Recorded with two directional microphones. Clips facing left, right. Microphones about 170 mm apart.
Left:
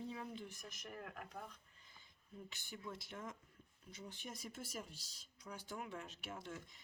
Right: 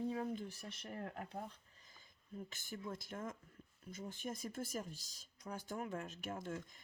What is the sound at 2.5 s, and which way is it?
Speech, 45° right (ahead or behind).